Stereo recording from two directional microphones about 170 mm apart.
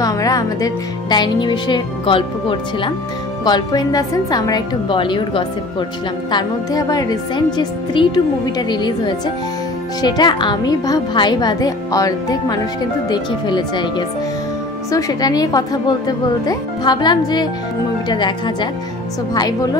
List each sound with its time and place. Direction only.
0.0 s music: 20° left (ahead or behind)
1.1 s a woman's voice: 25° left (ahead or behind)